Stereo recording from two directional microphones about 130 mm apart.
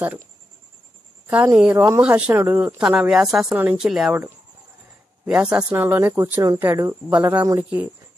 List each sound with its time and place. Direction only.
1.2 s a woman's voice: 15° right (ahead or behind)
5.2 s speech: 10° right (ahead or behind)
7.1 s speech: 10° right (ahead or behind)
7.4 s speech: 25° right (ahead or behind)